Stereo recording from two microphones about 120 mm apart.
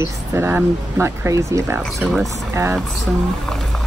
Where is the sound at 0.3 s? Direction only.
20° right (ahead or behind).